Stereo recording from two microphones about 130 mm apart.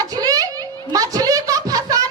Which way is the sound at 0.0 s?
30° right (ahead or behind).